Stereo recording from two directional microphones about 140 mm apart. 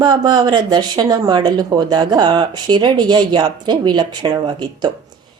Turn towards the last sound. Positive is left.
turn(degrees=-30)  # may be behind; listen again after turning